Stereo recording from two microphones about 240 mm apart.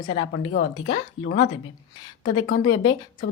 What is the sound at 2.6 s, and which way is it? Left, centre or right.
Speech, centre.